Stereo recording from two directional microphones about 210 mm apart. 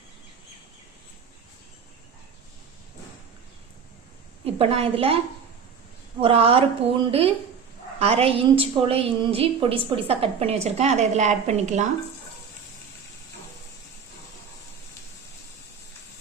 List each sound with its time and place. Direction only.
4.4 s a woman's voice: 30° right (ahead or behind)